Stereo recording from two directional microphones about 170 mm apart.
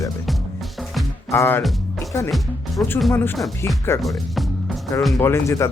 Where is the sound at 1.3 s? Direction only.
15° left (ahead or behind).